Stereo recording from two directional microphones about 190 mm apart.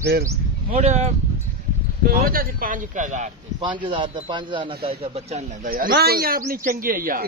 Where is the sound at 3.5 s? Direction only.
25° right (ahead or behind).